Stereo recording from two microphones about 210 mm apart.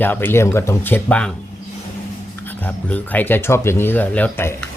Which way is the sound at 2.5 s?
10° left (ahead or behind).